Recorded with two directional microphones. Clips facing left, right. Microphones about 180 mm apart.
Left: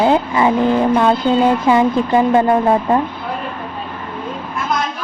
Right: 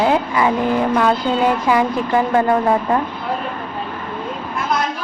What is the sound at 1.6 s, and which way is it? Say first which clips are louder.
Speech: left 3 dB; 25° left (ahead or behind).